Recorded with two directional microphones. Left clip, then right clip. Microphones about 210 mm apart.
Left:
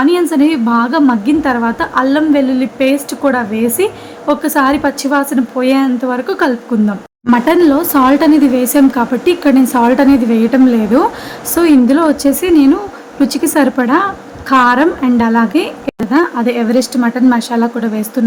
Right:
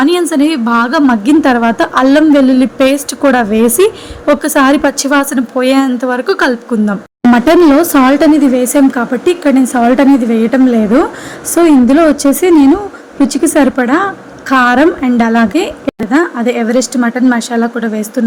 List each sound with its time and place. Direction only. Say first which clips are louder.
0.0 s a woman's voice: right 1 dB; 25° right (ahead or behind)